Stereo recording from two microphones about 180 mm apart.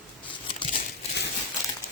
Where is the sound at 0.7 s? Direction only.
70° left (ahead or behind).